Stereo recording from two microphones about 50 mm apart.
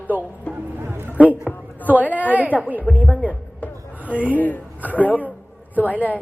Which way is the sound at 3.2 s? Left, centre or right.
Left.